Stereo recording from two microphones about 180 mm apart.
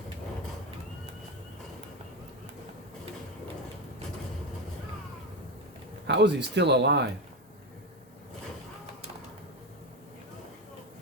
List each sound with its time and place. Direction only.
6.1 s speech: 70° right (ahead or behind)